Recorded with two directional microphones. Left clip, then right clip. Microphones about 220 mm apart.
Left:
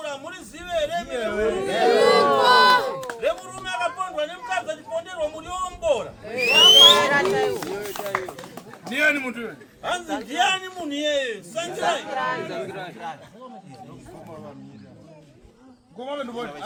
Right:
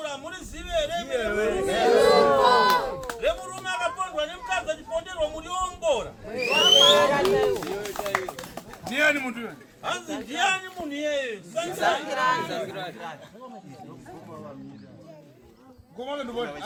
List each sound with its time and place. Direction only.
0.0 s a sound: 5° left (ahead or behind)
1.1 s chatter: 25° right (ahead or behind)
1.9 s crowd: 35° left (ahead or behind)
3.6 s a sound: 5° left (ahead or behind)
6.2 s a sound: 35° left (ahead or behind)
8.1 s run: 50° right (ahead or behind)
8.9 s a man's voice: centre (ahead or behind); by 10.6 s 20° left (ahead or behind)
10.8 s a man's voice: 45° left (ahead or behind)
11.8 s speech: 40° right (ahead or behind)
16.0 s a man's voice: 10° right (ahead or behind)